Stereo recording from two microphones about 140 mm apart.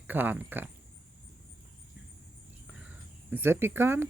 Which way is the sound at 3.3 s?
15° right (ahead or behind).